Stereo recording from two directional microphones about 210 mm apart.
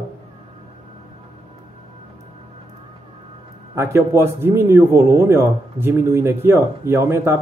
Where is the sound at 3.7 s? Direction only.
15° right (ahead or behind).